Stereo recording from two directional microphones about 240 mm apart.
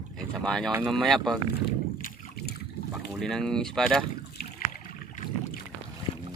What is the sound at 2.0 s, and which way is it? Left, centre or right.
Boat, left.